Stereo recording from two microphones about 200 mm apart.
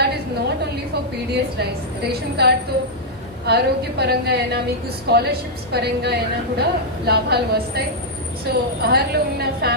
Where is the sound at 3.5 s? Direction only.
55° right (ahead or behind).